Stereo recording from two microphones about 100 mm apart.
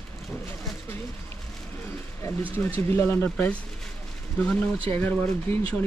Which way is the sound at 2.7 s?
25° left (ahead or behind).